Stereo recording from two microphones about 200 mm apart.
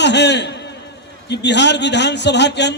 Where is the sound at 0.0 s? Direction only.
60° left (ahead or behind).